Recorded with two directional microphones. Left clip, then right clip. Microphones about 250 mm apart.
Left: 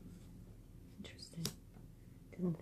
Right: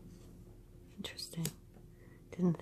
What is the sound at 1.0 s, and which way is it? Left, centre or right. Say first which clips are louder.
Whispering: right 10 dB; right.